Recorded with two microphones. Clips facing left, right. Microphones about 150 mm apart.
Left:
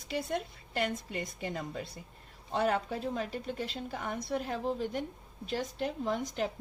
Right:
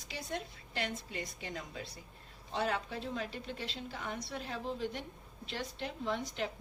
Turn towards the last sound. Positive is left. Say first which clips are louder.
# left 4 dB
turn(degrees=45)  # may be behind; listen again after turning